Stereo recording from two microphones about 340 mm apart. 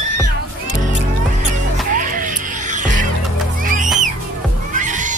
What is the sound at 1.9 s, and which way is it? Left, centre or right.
Music, right.